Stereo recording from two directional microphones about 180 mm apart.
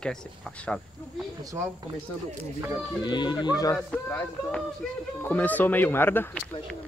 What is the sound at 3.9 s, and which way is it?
Speech, 10° left (ahead or behind).